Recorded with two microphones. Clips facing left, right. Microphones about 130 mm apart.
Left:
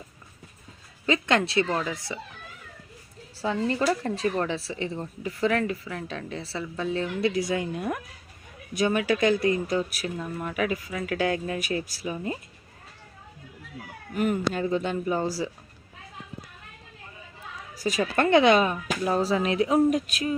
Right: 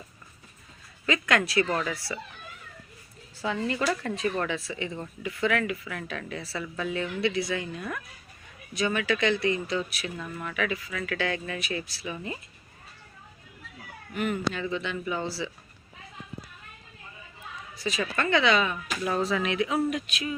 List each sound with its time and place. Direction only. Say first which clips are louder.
1.0 s speech: left 2 dB; 30° left (ahead or behind)
3.3 s speech: left 3 dB; 35° left (ahead or behind)
10.2 s speech: left 4 dB; 25° left (ahead or behind)
10.5 s speech: left 2 dB; 45° left (ahead or behind)
14.1 s speech: left 3 dB; 40° left (ahead or behind)
17.7 s speech: left 5 dB; 45° left (ahead or behind)
19.0 s speech: left 3 dB; 35° left (ahead or behind)